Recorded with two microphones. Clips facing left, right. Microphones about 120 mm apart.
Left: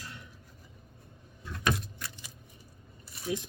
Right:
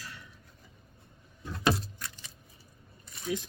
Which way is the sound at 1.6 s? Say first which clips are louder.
Right 3 dB; 30° right (ahead or behind).